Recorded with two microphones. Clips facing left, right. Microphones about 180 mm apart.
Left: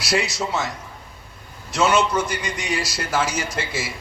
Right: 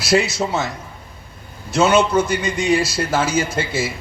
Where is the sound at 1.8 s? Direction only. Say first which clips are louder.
Right 4 dB; 25° right (ahead or behind).